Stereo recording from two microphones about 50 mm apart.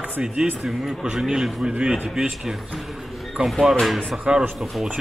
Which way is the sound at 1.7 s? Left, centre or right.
Centre.